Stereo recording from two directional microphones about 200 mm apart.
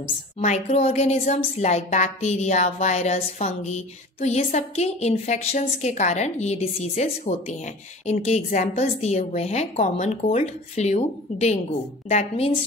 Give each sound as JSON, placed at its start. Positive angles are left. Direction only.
{"t": 0.4, "sound": "a woman's voice", "side_deg": 35}